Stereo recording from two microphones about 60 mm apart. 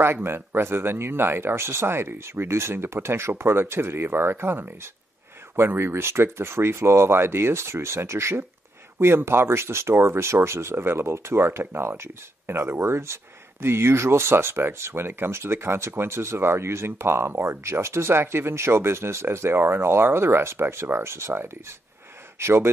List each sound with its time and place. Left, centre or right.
0.0 s speech: right